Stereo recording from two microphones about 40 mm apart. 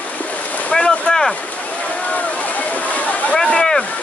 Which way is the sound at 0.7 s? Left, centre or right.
Centre.